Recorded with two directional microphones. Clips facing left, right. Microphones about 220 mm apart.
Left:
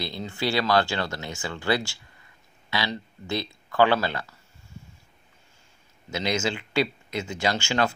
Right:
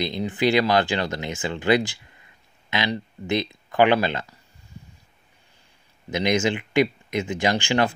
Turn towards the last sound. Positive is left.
turn(degrees=-15)  # may be behind; listen again after turning